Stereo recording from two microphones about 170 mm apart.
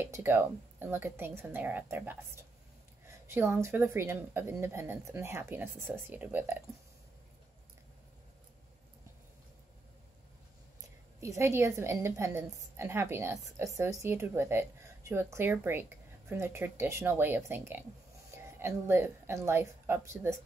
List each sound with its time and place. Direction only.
0.0 s speech: 10° right (ahead or behind)
11.1 s a woman's voice: 15° right (ahead or behind)